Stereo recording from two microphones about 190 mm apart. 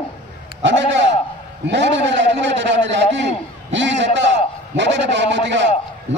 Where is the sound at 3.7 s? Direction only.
70° right (ahead or behind).